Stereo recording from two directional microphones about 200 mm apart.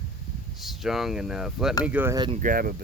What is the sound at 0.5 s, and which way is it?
Speech, centre (ahead or behind).